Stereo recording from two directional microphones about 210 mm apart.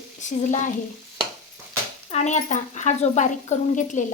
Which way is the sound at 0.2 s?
35° left (ahead or behind).